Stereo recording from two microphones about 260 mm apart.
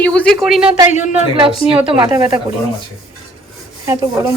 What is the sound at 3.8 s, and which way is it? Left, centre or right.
Speech, centre.